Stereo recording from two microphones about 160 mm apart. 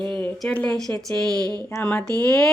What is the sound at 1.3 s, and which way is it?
Speech, 25° right (ahead or behind).